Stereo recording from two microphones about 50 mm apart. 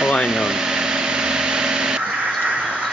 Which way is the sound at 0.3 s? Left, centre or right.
Centre.